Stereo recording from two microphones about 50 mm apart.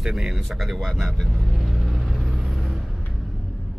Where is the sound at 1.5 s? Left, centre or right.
Centre.